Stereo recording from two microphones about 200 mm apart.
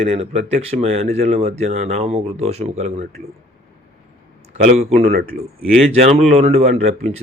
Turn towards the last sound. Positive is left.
turn(degrees=-35)  # may be behind; listen again after turning